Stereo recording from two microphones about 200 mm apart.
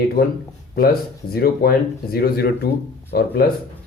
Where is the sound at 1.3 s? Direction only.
50° left (ahead or behind).